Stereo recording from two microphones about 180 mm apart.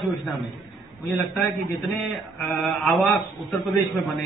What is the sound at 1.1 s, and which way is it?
A man's voice, 10° left (ahead or behind).